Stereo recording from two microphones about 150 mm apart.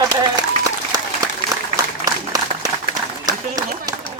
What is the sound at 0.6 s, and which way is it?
Applause, 25° right (ahead or behind).